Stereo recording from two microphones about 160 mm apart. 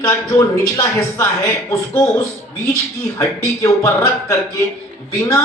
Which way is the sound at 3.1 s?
20° left (ahead or behind).